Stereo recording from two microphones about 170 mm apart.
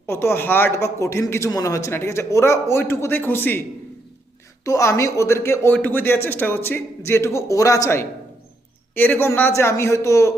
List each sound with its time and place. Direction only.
0.0 s a man's voice: 15° left (ahead or behind)
4.6 s a man's voice: 15° left (ahead or behind)